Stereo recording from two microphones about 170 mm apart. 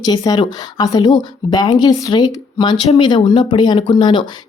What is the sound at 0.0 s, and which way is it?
A woman's voice, 25° left (ahead or behind).